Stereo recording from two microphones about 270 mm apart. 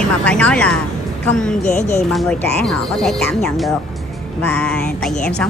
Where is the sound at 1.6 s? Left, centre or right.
Left.